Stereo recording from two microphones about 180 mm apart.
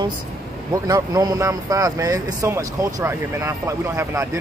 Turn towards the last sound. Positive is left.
turn(degrees=-15)  # may be behind; listen again after turning